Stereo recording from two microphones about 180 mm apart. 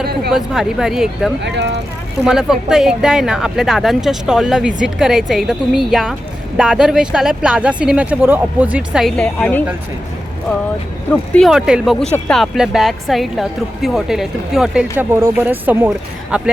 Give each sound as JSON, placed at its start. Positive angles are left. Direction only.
{"t": 0.3, "sound": "speech", "side_deg": 0}
{"t": 1.5, "sound": "speech", "side_deg": -75}
{"t": 2.2, "sound": "speech", "side_deg": -5}
{"t": 11.1, "sound": "speech", "side_deg": 0}